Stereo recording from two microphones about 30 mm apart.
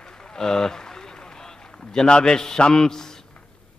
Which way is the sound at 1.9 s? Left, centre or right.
Left.